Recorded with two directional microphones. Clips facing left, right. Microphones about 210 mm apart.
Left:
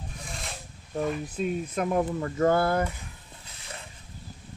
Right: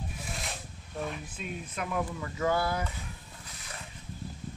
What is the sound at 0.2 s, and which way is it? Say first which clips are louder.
Rub: left 2 dB; centre (ahead or behind).